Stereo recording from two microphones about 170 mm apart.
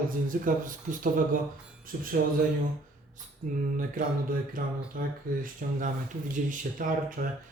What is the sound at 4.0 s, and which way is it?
Speech, 50° right (ahead or behind).